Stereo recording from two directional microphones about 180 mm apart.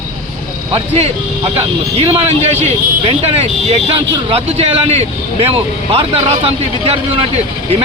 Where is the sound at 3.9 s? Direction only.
30° right (ahead or behind).